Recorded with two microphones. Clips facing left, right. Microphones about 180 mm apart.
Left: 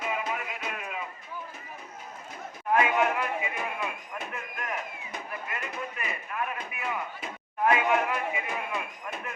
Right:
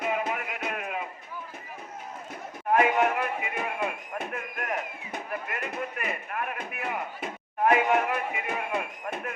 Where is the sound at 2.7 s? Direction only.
50° right (ahead or behind).